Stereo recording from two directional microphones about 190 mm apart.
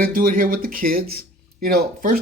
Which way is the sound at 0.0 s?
50° right (ahead or behind).